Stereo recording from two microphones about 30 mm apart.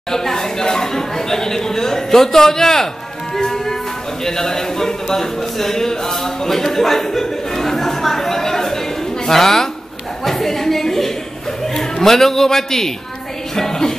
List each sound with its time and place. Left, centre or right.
0.1 s speech: centre
3.3 s music: centre
4.2 s speech: centre
10.2 s a sound: centre
11.6 s a man's voice: centre